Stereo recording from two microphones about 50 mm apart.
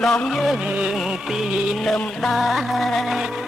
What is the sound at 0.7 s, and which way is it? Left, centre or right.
Music, right.